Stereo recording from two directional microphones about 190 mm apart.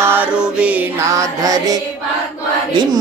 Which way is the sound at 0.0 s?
10° right (ahead or behind).